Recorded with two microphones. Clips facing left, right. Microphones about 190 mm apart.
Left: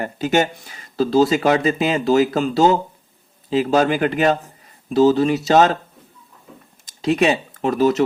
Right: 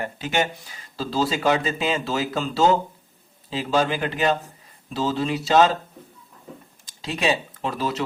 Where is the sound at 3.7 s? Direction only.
50° left (ahead or behind).